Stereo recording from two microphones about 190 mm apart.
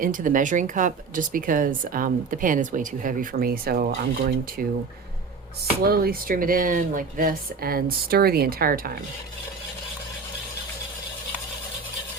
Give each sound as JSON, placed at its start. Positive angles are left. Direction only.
{"t": 0.0, "sound": "speech", "side_deg": -45}
{"t": 5.8, "sound": "speech", "side_deg": -55}